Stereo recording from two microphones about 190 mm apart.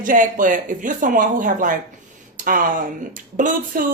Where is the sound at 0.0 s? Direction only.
45° right (ahead or behind).